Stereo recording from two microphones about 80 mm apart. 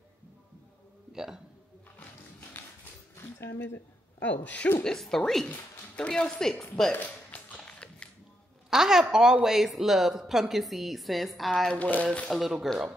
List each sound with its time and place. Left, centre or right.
1.1 s speech: centre
3.2 s a woman's voice: left
4.8 s a woman's voice: centre
6.9 s music: centre
7.5 s a sound: centre
8.6 s a woman's voice: centre
11.8 s speech: centre
12.3 s a woman's voice: centre